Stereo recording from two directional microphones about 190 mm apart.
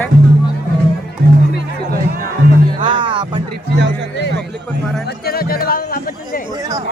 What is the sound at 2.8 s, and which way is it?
Music, 25° right (ahead or behind).